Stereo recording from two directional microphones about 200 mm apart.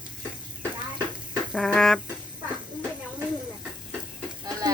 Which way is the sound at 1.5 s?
5° left (ahead or behind).